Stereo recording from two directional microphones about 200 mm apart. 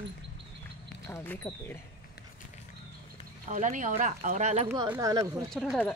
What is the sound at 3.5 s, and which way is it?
Speech, 40° right (ahead or behind).